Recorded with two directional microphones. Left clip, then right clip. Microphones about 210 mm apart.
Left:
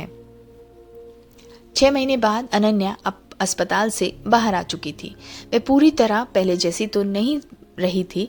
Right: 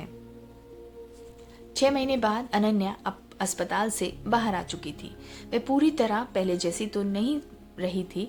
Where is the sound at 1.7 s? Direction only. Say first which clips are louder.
Left 7 dB; 30° left (ahead or behind).